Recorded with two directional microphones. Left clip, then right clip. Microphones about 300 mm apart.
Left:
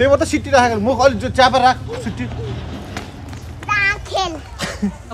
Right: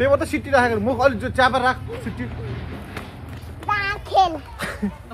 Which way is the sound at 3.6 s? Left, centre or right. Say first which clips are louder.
Left 6 dB; centre.